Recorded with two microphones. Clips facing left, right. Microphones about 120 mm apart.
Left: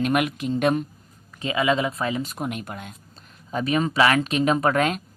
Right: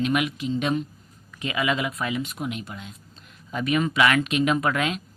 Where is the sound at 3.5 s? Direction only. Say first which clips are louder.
Left 1 dB; 35° left (ahead or behind).